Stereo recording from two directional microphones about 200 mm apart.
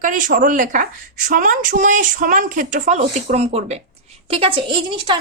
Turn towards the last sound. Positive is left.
turn(degrees=-25)  # may be behind; listen again after turning